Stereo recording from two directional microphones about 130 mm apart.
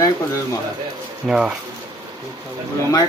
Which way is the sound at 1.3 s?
5° right (ahead or behind).